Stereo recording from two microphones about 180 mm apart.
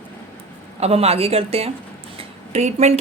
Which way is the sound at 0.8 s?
35° right (ahead or behind).